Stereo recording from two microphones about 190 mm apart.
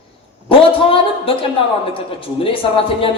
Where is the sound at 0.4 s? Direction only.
30° left (ahead or behind).